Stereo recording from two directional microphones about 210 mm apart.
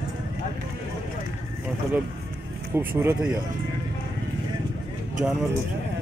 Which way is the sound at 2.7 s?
10° right (ahead or behind).